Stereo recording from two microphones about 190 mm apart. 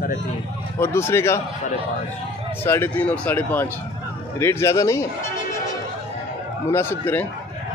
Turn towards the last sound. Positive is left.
turn(degrees=10)  # may be behind; listen again after turning